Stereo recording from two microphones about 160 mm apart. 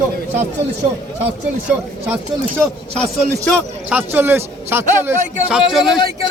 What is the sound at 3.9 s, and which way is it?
A man's voice, 10° right (ahead or behind).